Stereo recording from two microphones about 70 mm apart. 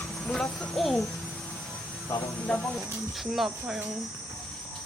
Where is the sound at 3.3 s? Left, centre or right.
Centre.